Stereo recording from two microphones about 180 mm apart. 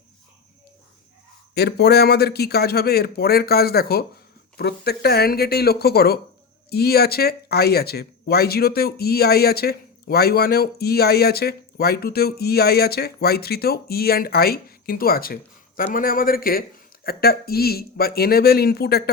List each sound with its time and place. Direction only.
1.5 s speech: 65° left (ahead or behind)